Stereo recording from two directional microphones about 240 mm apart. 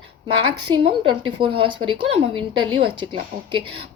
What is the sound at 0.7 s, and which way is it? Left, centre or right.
A woman's voice, centre.